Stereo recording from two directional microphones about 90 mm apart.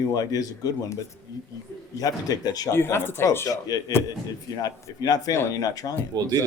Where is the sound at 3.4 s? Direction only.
40° left (ahead or behind).